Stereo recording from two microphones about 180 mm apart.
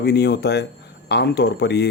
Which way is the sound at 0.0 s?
65° left (ahead or behind).